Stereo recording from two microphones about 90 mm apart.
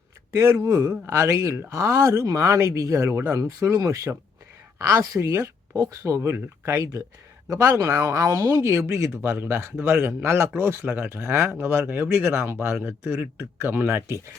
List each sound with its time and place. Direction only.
0.3 s speech: 30° right (ahead or behind)
7.5 s speech: 40° right (ahead or behind)